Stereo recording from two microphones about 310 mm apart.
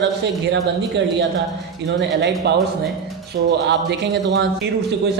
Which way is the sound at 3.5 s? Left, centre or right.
Right.